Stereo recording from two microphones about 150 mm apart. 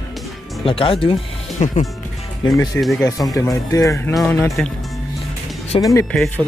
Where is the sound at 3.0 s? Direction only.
25° left (ahead or behind).